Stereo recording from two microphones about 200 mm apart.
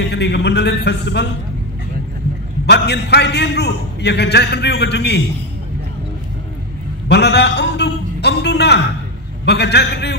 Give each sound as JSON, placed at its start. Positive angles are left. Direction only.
{"t": 0.1, "sound": "a man's voice", "side_deg": 60}
{"t": 2.6, "sound": "a man's voice", "side_deg": 55}
{"t": 7.1, "sound": "a sound", "side_deg": 55}
{"t": 9.5, "sound": "a man's voice", "side_deg": 55}